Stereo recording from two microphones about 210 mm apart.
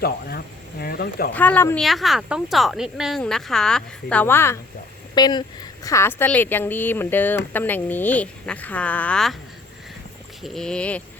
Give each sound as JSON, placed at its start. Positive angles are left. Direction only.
{"t": 0.0, "sound": "speech", "side_deg": 50}
{"t": 1.3, "sound": "a woman's voice", "side_deg": 5}
{"t": 10.4, "sound": "a woman's voice", "side_deg": 0}